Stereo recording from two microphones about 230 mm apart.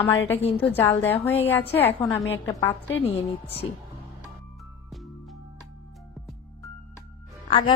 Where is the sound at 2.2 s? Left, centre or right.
Left.